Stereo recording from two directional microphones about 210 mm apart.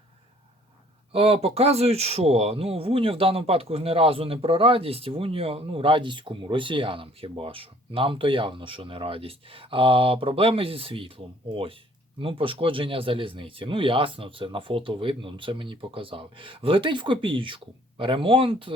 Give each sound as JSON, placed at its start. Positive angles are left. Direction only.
{"t": 1.1, "sound": "speech", "side_deg": -30}